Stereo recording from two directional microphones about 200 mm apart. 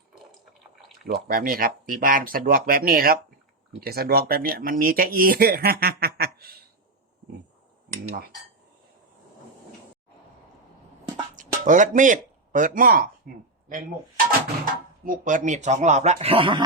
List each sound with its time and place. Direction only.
1.0 s speech: 50° right (ahead or behind)
11.3 s speech: 40° right (ahead or behind)